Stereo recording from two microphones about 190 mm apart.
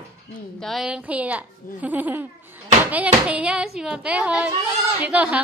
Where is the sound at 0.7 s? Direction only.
Centre (ahead or behind).